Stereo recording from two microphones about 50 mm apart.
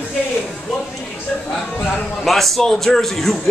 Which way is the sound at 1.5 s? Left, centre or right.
Centre.